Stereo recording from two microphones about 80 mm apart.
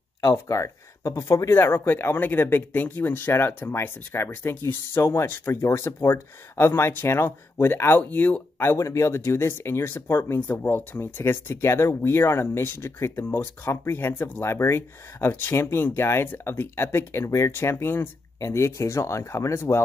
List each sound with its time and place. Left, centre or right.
0.2 s speech: left
8.7 s speech: left